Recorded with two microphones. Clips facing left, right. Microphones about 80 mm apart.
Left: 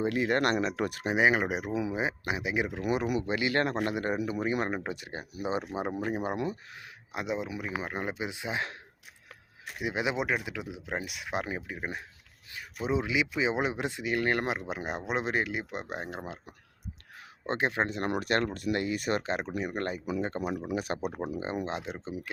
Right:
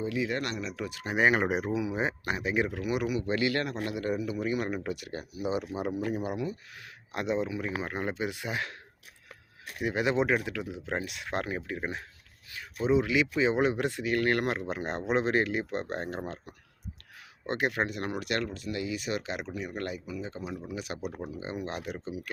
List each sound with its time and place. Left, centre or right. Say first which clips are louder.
0.0 s speech: left 4 dB; left
1.2 s speech: right 1 dB; centre
3.6 s speech: left 3 dB; left
7.1 s speech: right 3 dB; centre; by 8.7 s left
9.7 s speech: right 3 dB; centre
17.4 s speech: even; left
20.1 s speech: left 6 dB; left
20.3 s speech: left 5 dB; left
20.7 s speech: left 4 dB; left
21.7 s speech: left 1 dB; left